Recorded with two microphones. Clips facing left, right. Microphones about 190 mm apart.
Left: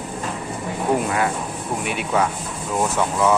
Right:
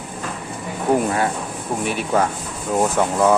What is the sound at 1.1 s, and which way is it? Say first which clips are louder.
Speech: right 1 dB; 35° right (ahead or behind).